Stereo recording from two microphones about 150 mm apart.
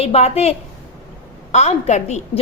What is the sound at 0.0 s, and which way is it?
Speech, 45° left (ahead or behind).